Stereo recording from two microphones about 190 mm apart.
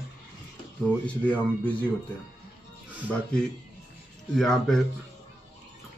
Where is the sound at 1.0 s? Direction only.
5° left (ahead or behind).